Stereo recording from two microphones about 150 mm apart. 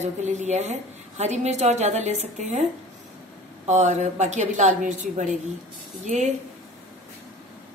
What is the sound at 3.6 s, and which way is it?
A woman's voice, 50° right (ahead or behind).